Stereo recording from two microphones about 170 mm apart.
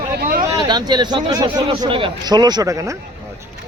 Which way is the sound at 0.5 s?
25° right (ahead or behind).